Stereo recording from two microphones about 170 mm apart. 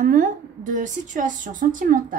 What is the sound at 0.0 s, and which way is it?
A woman's voice, 50° right (ahead or behind).